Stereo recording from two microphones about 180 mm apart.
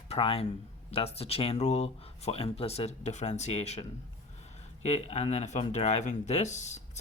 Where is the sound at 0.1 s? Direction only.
30° left (ahead or behind).